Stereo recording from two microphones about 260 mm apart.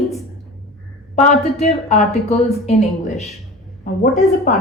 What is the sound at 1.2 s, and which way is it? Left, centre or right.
A woman's voice, left.